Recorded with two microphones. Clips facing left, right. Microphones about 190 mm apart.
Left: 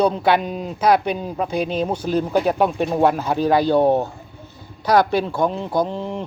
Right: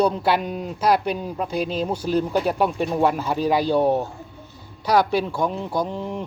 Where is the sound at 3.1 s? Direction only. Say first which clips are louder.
Left 3 dB; 45° left (ahead or behind).